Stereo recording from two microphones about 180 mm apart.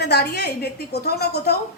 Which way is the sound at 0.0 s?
65° left (ahead or behind).